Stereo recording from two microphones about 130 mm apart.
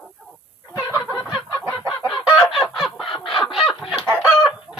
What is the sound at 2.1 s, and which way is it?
Chicken, centre (ahead or behind).